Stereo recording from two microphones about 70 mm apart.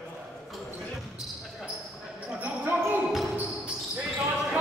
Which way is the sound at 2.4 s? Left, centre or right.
Right.